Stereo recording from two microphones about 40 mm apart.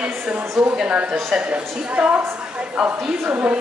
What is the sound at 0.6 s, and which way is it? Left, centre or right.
Speech, centre.